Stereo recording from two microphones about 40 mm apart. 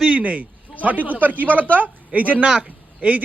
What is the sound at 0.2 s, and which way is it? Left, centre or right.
A man's voice, right.